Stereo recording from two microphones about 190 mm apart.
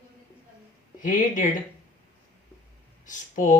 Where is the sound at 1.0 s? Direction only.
45° left (ahead or behind).